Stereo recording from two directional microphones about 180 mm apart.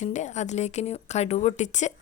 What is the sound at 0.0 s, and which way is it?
Speech, 40° left (ahead or behind).